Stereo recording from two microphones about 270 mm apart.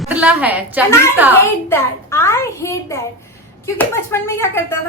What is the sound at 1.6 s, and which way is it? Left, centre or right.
A woman's voice, centre.